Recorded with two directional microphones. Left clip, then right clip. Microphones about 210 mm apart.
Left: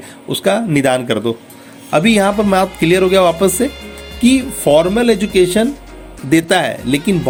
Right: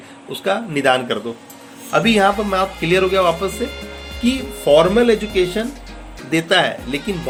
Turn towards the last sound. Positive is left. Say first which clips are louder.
# left 7 dB
turn(degrees=50)  # may be behind; listen again after turning